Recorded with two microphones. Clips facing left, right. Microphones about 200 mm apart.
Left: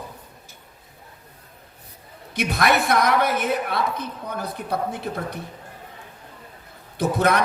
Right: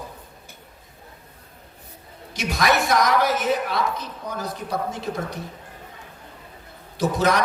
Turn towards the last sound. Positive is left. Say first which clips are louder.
# even
turn(degrees=55)  # may be behind; listen again after turning